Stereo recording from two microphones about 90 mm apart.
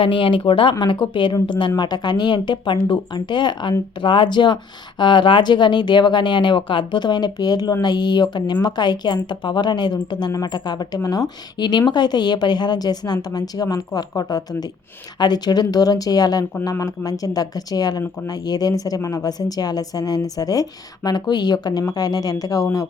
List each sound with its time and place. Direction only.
0.0 s a woman's voice: 70° left (ahead or behind); by 22.9 s 35° left (ahead or behind)